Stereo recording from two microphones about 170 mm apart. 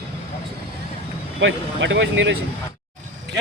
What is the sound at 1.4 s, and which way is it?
Speech, 90° right.